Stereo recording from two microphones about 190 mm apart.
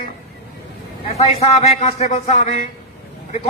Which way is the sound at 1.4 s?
35° left (ahead or behind).